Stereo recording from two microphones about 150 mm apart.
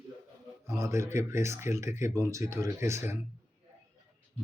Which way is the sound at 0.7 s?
20° right (ahead or behind).